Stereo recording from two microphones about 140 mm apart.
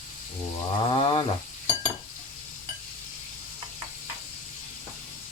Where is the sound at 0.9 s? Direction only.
35° left (ahead or behind).